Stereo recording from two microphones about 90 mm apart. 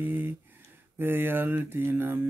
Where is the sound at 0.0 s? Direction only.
20° right (ahead or behind).